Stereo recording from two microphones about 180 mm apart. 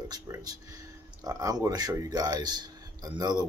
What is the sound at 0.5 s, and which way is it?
Speech, 20° right (ahead or behind).